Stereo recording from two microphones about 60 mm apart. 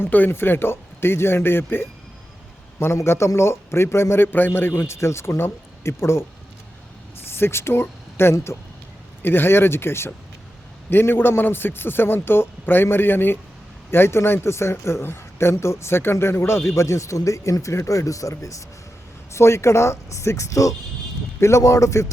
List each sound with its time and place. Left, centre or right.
0.0 s a man's voice: left
7.3 s a man's voice: left
19.3 s speech: left